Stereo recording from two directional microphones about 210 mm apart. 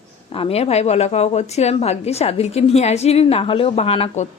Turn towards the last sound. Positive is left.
turn(degrees=30)  # may be behind; listen again after turning